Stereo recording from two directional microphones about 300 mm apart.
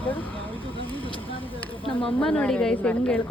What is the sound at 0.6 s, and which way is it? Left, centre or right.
Vehicle, centre.